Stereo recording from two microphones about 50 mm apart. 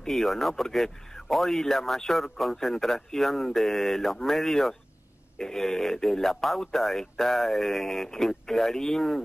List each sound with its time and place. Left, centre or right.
0.0 s speech: centre